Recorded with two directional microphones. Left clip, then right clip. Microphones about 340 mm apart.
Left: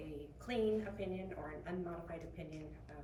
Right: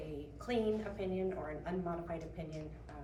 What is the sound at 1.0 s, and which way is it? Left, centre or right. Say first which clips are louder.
A woman's voice: right 6 dB; centre.